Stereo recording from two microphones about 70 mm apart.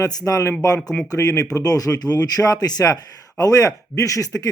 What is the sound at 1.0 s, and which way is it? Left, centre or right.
Speech, left.